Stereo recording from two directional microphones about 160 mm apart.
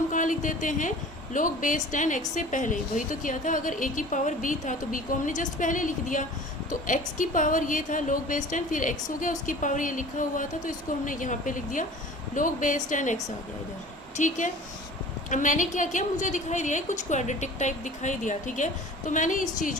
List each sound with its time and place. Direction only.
0.1 s a woman's voice: 55° left (ahead or behind)
14.2 s a woman's voice: 50° left (ahead or behind)